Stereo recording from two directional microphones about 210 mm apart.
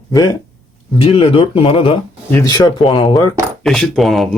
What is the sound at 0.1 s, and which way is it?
Speech, 20° left (ahead or behind).